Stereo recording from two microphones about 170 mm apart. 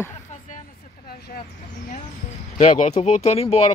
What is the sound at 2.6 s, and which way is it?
Speech, 45° left (ahead or behind).